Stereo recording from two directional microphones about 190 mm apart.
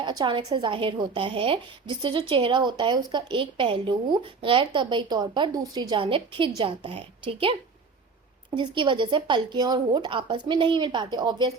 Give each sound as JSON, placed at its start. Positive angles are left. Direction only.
{"t": 0.0, "sound": "speech", "side_deg": -25}
{"t": 8.5, "sound": "speech", "side_deg": -25}